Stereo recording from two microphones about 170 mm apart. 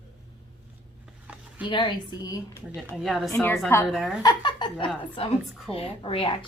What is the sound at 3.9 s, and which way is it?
Speech, centre (ahead or behind).